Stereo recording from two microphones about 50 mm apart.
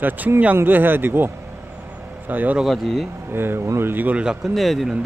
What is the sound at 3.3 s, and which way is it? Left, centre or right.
Speech, right.